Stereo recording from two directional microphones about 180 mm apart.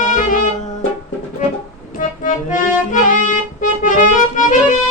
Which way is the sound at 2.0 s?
45° left (ahead or behind).